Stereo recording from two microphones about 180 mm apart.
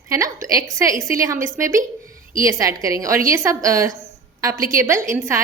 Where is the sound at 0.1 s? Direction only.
15° right (ahead or behind).